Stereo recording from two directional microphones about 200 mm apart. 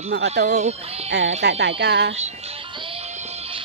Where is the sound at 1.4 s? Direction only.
60° right (ahead or behind).